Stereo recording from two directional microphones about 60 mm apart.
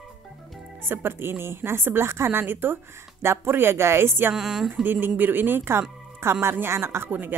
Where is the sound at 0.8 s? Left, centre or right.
Right.